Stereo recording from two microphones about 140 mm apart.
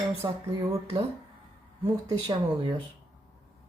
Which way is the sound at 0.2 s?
30° right (ahead or behind).